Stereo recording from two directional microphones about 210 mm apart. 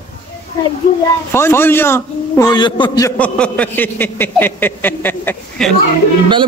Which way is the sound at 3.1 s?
5° left (ahead or behind).